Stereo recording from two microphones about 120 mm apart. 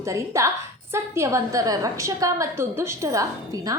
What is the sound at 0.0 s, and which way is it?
A woman's voice, 25° right (ahead or behind).